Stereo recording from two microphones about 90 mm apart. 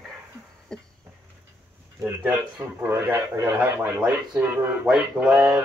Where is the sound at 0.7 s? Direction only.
5° left (ahead or behind).